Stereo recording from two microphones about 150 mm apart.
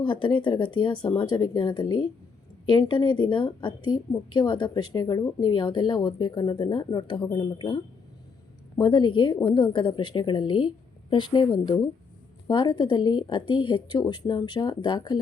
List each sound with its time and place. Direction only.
0.0 s a woman's voice: 35° left (ahead or behind)
8.8 s a woman's voice: 30° left (ahead or behind)